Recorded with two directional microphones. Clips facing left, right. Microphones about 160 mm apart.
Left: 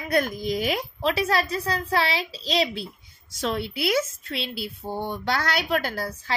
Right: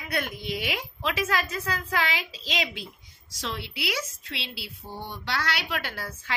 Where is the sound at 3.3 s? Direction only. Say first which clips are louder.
Left 7 dB; 50° left (ahead or behind).